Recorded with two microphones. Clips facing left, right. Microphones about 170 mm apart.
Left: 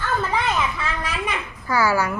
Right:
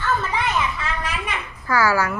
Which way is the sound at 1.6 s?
15° left (ahead or behind).